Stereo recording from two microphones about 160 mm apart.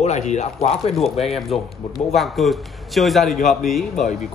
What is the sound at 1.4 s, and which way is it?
A man's voice, centre (ahead or behind).